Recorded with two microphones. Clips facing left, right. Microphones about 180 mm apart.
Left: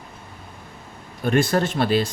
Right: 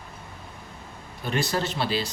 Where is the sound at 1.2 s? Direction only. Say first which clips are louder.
Left 7 dB; 50° left (ahead or behind).